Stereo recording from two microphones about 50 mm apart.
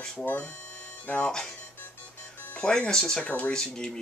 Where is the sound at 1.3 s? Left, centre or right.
Centre.